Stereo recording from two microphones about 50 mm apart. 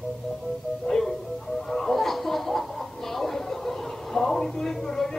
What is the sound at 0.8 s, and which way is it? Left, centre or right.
Music, centre.